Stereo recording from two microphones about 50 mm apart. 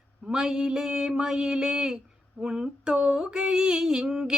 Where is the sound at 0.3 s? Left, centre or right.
Centre.